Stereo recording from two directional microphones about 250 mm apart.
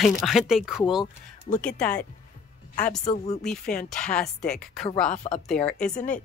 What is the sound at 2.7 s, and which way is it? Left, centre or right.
Speech, left.